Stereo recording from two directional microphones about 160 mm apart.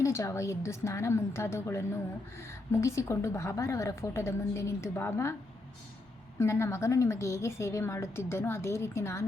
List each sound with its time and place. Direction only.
0.0 s a woman's voice: 20° left (ahead or behind)
6.4 s a woman's voice: 15° left (ahead or behind)